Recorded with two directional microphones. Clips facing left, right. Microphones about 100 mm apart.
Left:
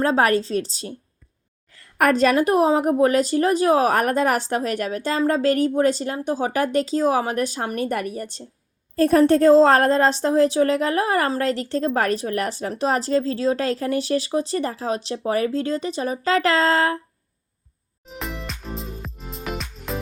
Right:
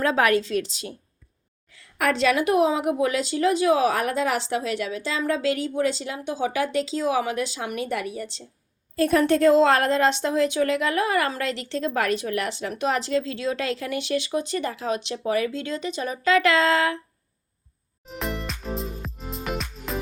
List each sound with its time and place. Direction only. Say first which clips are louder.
0.0 s a woman's voice: left 2 dB; 35° left (ahead or behind)
1.7 s a woman's voice: left 5 dB; 50° left (ahead or behind)
18.0 s music: right 2 dB; centre (ahead or behind)